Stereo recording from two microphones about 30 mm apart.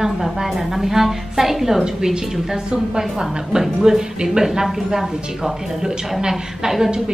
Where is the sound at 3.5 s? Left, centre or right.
Centre.